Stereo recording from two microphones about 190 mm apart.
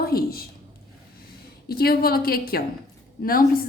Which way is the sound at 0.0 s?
55° left (ahead or behind).